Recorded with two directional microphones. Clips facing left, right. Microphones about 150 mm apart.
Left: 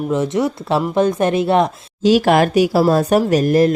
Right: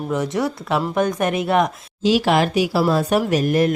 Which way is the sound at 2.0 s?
45° left (ahead or behind).